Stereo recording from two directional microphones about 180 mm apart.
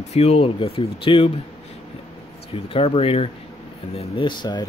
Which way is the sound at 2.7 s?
30° left (ahead or behind).